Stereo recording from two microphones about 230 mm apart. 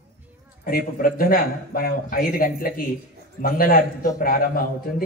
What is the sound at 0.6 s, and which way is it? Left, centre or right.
Speech, left.